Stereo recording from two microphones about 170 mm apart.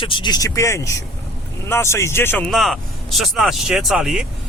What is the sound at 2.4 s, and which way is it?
Speech, centre (ahead or behind).